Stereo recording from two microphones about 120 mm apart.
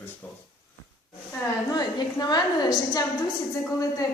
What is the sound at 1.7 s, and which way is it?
A woman's voice, 35° left (ahead or behind).